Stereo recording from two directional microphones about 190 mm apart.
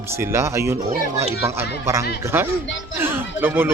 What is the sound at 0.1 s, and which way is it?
Speech, 15° right (ahead or behind).